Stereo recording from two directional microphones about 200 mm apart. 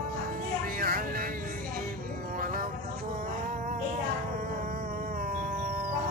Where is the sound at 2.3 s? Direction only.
45° right (ahead or behind).